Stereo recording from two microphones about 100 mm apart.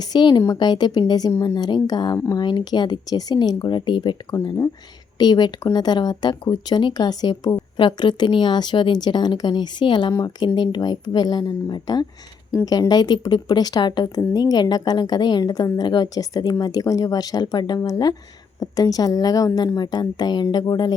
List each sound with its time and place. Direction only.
0.0 s speech: 45° left (ahead or behind)
10.1 s a woman's voice: 35° left (ahead or behind)
10.4 s a woman's voice: 50° left (ahead or behind)